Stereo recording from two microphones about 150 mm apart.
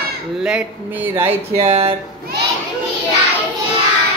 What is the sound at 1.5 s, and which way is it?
Speech, 40° right (ahead or behind).